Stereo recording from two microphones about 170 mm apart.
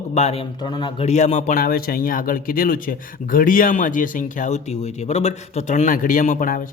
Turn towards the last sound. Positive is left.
turn(degrees=55)  # may be behind; listen again after turning